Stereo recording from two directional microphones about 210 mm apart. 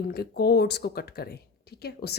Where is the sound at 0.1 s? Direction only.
50° left (ahead or behind).